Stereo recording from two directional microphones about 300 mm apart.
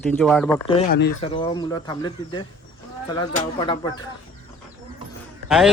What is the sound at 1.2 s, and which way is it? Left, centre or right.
Speech, centre.